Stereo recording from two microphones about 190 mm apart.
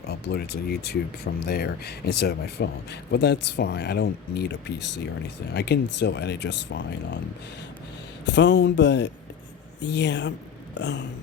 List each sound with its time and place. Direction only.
0.1 s speech: 60° left (ahead or behind)
8.2 s speech: 65° left (ahead or behind)